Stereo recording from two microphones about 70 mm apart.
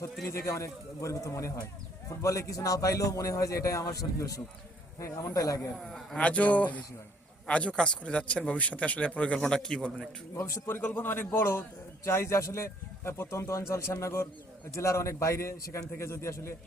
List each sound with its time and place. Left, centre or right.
0.3 s a man's voice: left
5.7 s a man's voice: centre
6.1 s speech: centre
10.3 s a man's voice: left
10.7 s a man's voice: left